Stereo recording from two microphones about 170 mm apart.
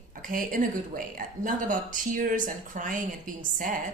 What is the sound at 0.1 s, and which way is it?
Speech, 55° right (ahead or behind).